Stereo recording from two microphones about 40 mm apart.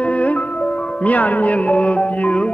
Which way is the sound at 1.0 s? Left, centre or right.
Left.